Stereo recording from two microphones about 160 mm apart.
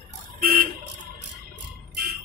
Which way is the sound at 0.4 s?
65° right (ahead or behind).